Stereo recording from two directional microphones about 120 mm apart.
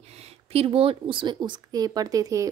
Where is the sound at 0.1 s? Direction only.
55° right (ahead or behind).